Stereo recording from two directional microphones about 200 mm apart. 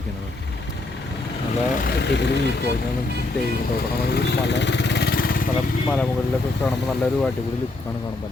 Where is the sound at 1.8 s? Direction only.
55° left (ahead or behind).